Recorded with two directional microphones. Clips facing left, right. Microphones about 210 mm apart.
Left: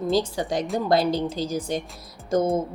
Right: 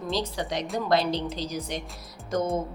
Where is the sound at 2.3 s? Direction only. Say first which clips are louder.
Left 5 dB; 30° left (ahead or behind).